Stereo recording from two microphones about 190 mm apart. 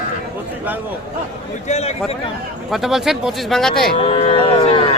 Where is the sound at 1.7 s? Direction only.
35° left (ahead or behind).